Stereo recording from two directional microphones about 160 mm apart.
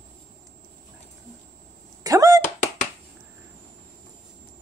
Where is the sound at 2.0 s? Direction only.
20° right (ahead or behind).